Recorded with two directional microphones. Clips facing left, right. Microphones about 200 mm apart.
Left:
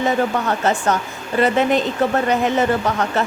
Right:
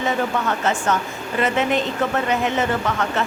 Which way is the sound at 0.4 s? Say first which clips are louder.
Left 3 dB; 35° left (ahead or behind).